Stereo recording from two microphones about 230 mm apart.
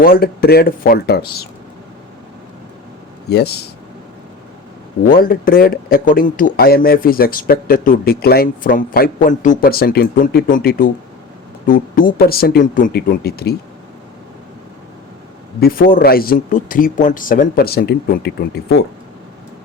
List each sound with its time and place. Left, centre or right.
0.0 s speech: left
3.2 s speech: left
5.0 s speech: left
15.6 s speech: left